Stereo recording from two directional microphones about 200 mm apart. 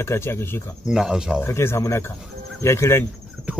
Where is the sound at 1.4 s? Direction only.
10° left (ahead or behind).